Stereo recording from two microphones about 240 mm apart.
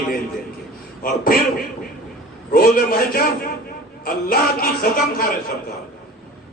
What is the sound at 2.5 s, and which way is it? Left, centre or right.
A man's voice, left.